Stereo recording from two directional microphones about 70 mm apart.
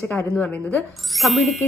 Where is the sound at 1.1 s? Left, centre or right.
Centre.